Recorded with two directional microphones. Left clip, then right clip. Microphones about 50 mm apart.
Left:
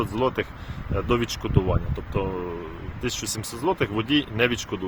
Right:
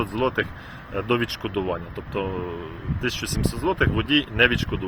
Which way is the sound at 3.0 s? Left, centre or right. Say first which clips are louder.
Right 3 dB; left.